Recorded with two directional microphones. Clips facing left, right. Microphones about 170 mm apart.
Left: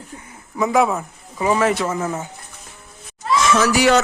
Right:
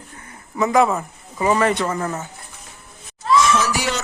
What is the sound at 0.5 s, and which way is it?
Speech, centre (ahead or behind).